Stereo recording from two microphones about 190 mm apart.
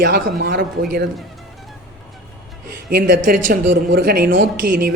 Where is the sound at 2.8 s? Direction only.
50° right (ahead or behind).